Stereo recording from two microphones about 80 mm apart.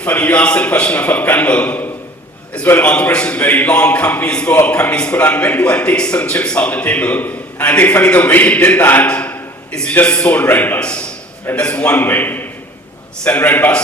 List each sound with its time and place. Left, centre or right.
0.0 s a man's voice: centre
10.8 s a man's voice: centre